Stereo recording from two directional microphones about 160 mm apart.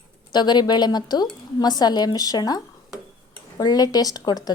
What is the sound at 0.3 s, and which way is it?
A woman's voice, 25° left (ahead or behind).